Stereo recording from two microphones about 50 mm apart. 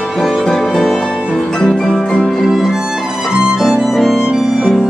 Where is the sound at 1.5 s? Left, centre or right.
Centre.